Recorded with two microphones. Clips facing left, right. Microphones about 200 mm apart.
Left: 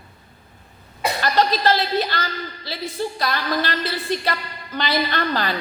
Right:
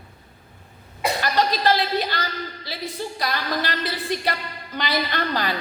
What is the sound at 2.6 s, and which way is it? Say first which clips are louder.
A woman's voice: left 6 dB; 15° right (ahead or behind).